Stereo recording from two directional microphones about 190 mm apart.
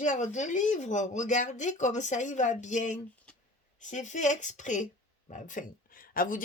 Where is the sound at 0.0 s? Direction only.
40° left (ahead or behind).